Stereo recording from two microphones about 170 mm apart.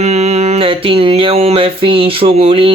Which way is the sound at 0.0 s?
40° right (ahead or behind).